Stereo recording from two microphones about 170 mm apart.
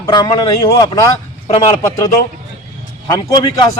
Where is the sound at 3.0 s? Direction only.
25° left (ahead or behind).